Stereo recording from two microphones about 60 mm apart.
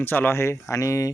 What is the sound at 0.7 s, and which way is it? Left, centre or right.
Speech, left.